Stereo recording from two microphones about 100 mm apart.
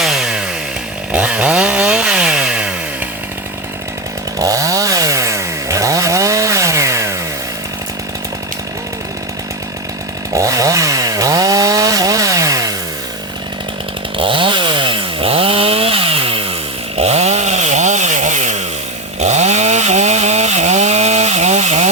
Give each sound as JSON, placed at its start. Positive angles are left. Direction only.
{"t": 0.0, "sound": "chainsaw", "side_deg": -5}
{"t": 4.4, "sound": "chainsaw", "side_deg": -35}
{"t": 10.3, "sound": "chainsaw", "side_deg": -35}
{"t": 14.2, "sound": "chainsaw", "side_deg": -60}
{"t": 17.0, "sound": "chainsaw", "side_deg": -90}
{"t": 19.3, "sound": "chainsaw", "side_deg": -90}